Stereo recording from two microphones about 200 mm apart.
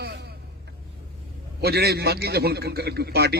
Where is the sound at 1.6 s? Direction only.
55° right (ahead or behind).